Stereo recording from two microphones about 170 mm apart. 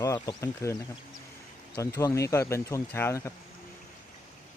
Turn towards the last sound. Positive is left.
turn(degrees=15)  # may be behind; listen again after turning